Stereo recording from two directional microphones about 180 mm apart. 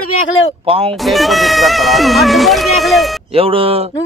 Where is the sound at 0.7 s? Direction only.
30° right (ahead or behind).